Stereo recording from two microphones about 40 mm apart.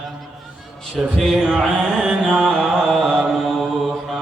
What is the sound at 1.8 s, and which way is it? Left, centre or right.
Music, centre.